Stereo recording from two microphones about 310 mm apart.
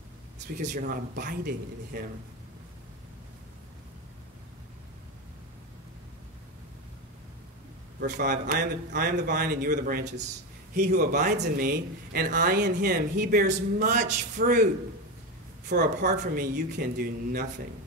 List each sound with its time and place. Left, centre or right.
0.6 s speech: right
8.0 s speech: right
15.7 s speech: right